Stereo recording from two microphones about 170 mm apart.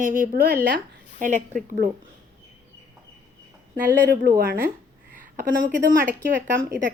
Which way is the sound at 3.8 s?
55° right (ahead or behind).